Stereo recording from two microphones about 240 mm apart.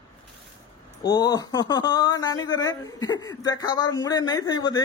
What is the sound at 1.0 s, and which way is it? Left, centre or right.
Speech, centre.